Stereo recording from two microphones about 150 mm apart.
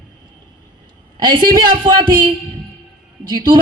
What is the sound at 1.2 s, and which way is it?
A woman's voice, 30° right (ahead or behind).